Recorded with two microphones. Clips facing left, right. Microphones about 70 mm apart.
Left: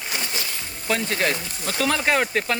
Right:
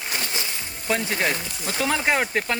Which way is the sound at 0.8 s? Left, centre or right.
Centre.